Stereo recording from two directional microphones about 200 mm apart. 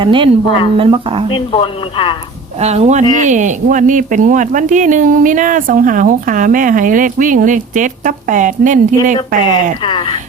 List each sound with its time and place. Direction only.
0.0 s a woman's voice: 25° right (ahead or behind)
1.3 s speech: 25° left (ahead or behind)
2.6 s speech: 30° right (ahead or behind)
9.1 s speech: 20° left (ahead or behind)